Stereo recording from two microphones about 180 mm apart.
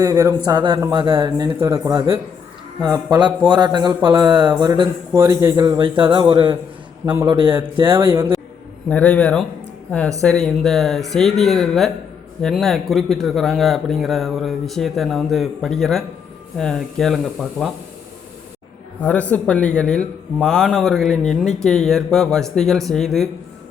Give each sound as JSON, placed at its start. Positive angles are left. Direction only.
{"t": 0.0, "sound": "a man's voice", "side_deg": -20}
{"t": 2.8, "sound": "a man's voice", "side_deg": -20}
{"t": 7.0, "sound": "a man's voice", "side_deg": -15}
{"t": 8.1, "sound": "a man's voice", "side_deg": -15}
{"t": 8.9, "sound": "speech", "side_deg": 10}
{"t": 19.0, "sound": "speech", "side_deg": 10}